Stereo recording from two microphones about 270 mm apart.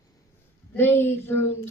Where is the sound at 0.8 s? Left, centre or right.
Centre.